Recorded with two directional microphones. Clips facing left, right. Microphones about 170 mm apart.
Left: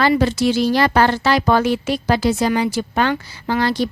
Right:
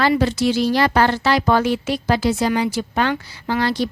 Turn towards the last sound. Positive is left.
turn(degrees=45)  # may be behind; listen again after turning